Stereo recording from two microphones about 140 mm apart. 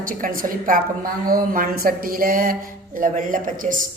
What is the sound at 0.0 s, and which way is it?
A woman's voice, 80° right.